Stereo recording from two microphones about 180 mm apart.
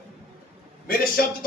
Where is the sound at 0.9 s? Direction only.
55° left (ahead or behind).